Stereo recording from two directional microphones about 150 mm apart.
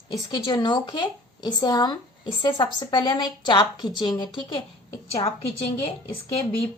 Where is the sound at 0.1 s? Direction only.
30° left (ahead or behind).